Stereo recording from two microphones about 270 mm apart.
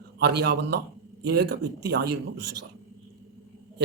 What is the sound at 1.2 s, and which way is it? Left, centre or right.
Speech, right.